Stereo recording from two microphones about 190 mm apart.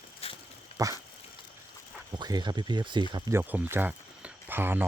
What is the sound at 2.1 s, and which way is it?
Speech, 20° right (ahead or behind).